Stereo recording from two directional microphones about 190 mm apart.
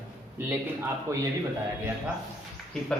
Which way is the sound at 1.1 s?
15° right (ahead or behind).